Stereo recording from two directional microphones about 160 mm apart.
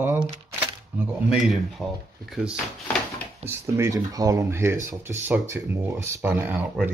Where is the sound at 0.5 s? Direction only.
10° right (ahead or behind).